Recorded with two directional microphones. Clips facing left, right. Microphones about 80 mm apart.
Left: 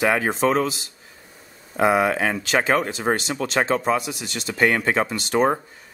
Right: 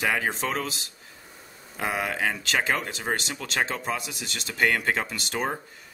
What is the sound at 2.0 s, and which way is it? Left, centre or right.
Speech, left.